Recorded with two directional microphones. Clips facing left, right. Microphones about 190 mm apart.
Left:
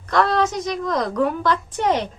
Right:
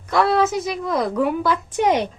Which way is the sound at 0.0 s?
5° right (ahead or behind).